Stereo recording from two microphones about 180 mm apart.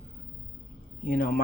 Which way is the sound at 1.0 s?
50° left (ahead or behind).